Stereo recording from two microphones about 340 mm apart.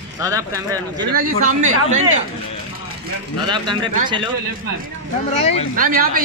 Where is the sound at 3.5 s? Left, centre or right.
Centre.